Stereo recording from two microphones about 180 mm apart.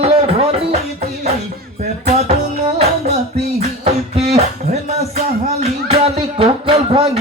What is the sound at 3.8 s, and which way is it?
Beatboxing, 35° right (ahead or behind).